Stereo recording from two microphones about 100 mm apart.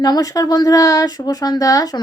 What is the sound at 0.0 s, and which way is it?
Speech, 40° left (ahead or behind).